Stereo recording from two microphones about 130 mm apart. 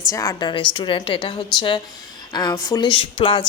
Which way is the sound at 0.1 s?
25° left (ahead or behind).